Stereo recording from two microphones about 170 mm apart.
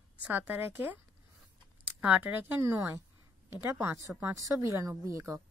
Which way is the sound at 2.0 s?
10° right (ahead or behind).